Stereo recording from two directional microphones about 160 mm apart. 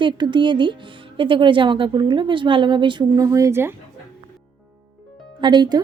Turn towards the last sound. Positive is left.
turn(degrees=-25)  # may be behind; listen again after turning